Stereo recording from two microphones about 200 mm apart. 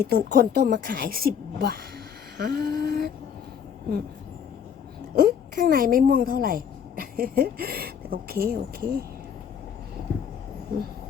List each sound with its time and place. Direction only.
0.0 s a woman's voice: 55° right (ahead or behind)
2.4 s a sound: 50° right (ahead or behind)
5.1 s a woman's voice: 45° right (ahead or behind)